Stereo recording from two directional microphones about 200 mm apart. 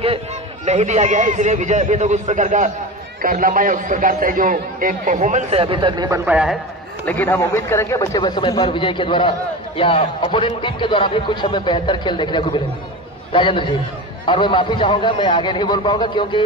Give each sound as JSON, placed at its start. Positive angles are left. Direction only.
{"t": 0.7, "sound": "a man's voice", "side_deg": -35}
{"t": 7.1, "sound": "a man's voice", "side_deg": 10}